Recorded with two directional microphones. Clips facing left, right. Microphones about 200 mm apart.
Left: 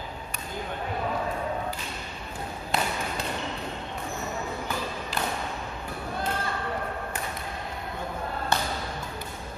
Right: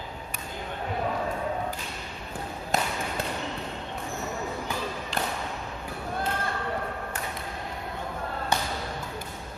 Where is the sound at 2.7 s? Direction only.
45° right (ahead or behind).